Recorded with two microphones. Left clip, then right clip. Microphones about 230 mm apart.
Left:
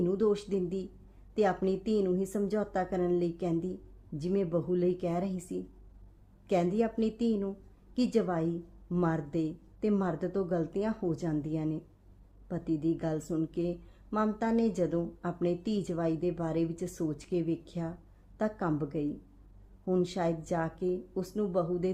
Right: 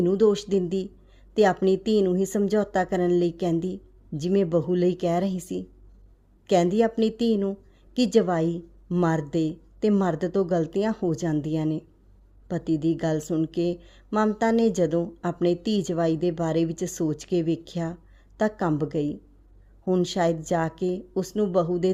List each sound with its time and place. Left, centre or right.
0.0 s speech: right